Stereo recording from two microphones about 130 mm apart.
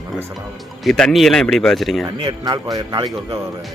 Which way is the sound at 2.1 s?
35° right (ahead or behind).